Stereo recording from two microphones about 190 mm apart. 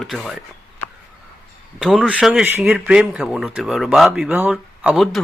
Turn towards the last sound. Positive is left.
turn(degrees=0)  # may be behind; listen again after turning